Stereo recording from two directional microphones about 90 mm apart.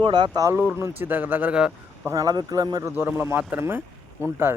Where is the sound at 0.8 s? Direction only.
20° right (ahead or behind).